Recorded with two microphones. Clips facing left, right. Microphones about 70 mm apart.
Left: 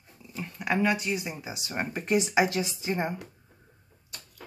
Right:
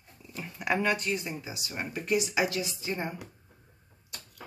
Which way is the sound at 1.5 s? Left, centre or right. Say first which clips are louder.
Left 3 dB; left.